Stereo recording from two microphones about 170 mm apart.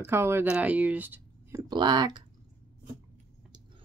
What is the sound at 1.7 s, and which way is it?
Speech, 25° right (ahead or behind).